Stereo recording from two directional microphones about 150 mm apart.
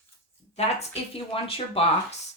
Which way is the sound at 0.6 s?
45° left (ahead or behind).